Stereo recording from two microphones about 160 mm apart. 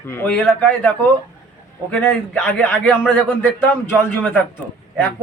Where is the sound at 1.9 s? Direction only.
10° left (ahead or behind).